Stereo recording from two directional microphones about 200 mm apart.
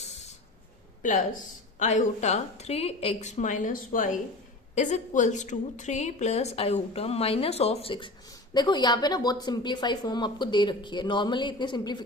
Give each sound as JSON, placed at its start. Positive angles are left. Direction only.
{"t": 0.0, "sound": "spray", "side_deg": 35}
{"t": 1.0, "sound": "a woman's voice", "side_deg": 40}